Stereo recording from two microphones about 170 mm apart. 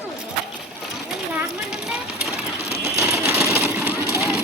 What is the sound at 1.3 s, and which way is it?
Speech, 5° right (ahead or behind).